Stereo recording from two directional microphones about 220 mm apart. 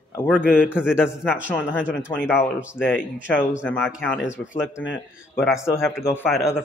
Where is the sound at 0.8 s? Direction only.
5° right (ahead or behind).